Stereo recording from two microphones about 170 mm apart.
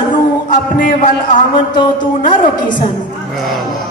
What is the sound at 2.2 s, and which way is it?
Music, 50° left (ahead or behind).